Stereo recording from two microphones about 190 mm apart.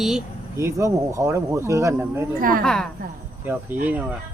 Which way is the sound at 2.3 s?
45° right (ahead or behind).